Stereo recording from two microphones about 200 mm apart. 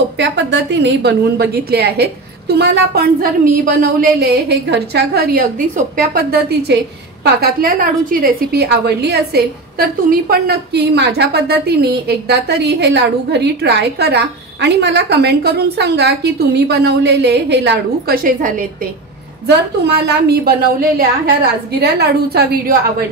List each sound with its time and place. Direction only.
0.2 s a woman's voice: 60° right (ahead or behind); by 18.7 s 45° right (ahead or behind)
20.1 s a woman's voice: 50° right (ahead or behind)